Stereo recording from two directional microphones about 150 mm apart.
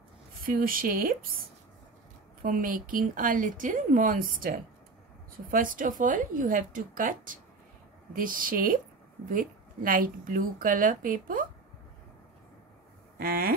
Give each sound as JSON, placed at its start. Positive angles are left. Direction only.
{"t": 0.4, "sound": "speech", "side_deg": -70}
{"t": 2.4, "sound": "a woman's voice", "side_deg": -65}
{"t": 13.2, "sound": "speech", "side_deg": -85}